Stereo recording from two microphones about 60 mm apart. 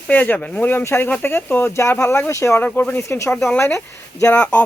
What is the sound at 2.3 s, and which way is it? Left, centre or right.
Speech, left.